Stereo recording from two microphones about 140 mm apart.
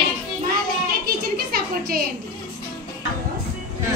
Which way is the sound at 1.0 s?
90° right.